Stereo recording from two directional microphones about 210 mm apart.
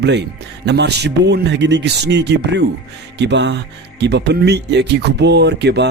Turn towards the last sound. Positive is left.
turn(degrees=-55)  # may be behind; listen again after turning